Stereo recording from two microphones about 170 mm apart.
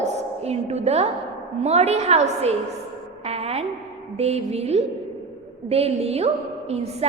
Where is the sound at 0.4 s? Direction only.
40° right (ahead or behind).